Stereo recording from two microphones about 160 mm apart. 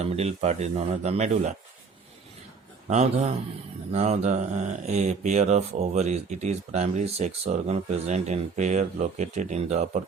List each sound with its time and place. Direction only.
0.0 s speech: 40° right (ahead or behind)
2.8 s speech: 45° right (ahead or behind)